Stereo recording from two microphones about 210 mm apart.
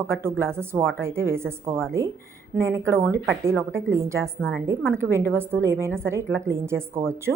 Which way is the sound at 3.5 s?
5° left (ahead or behind).